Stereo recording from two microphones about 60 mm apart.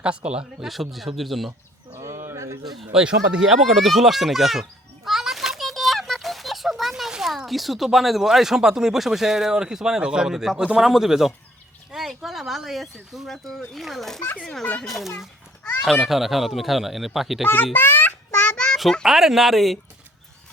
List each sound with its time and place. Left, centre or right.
0.0 s speech: centre
0.7 s speech: centre
2.0 s a sound: right
2.6 s speech: centre
3.0 s speech: centre
3.6 s speech: centre
5.0 s a sound: centre
10.0 s speech: centre
17.5 s a child's voice: left
18.5 s a sound: centre
18.8 s a child's voice: centre
19.0 s speech: centre